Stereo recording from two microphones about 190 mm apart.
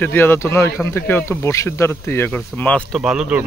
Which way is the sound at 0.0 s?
10° left (ahead or behind).